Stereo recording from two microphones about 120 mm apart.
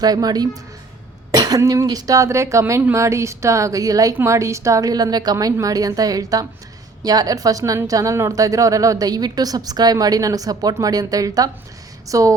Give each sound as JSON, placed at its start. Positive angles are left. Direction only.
{"t": 0.0, "sound": "a woman's voice", "side_deg": -35}